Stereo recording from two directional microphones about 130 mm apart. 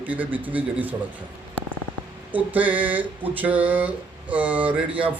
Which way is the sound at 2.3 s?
10° right (ahead or behind).